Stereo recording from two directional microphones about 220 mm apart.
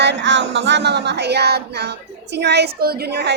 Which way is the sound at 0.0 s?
55° right (ahead or behind).